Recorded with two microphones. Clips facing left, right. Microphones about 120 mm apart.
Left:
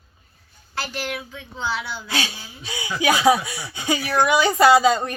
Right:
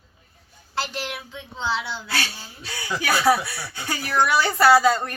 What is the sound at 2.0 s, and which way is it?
A woman's voice, 20° left (ahead or behind).